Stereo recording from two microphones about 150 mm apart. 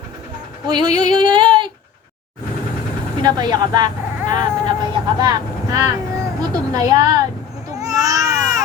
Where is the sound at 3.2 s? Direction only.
25° right (ahead or behind).